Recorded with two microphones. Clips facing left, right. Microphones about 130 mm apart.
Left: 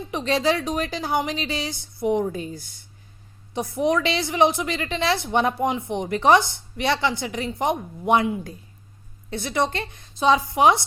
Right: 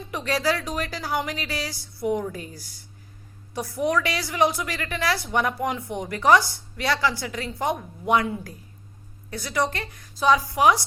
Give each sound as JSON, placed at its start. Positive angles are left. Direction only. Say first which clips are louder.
{"t": 0.1, "sound": "a woman's voice", "louder": "left 3 dB", "side_deg": 20}
{"t": 9.3, "sound": "a woman's voice", "louder": "left 2 dB", "side_deg": 25}